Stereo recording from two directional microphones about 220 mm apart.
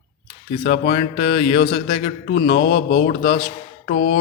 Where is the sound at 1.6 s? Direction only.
45° left (ahead or behind).